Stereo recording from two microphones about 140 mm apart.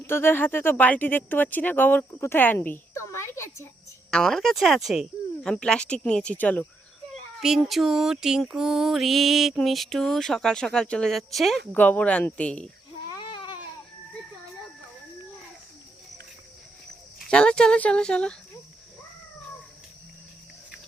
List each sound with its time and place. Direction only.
0.0 s speech: 15° left (ahead or behind)
4.1 s music: 5° left (ahead or behind)
7.4 s music: 5° right (ahead or behind)
11.7 s speech: 10° left (ahead or behind)
13.1 s baby cry: 35° left (ahead or behind)
17.2 s speech: 5° left (ahead or behind)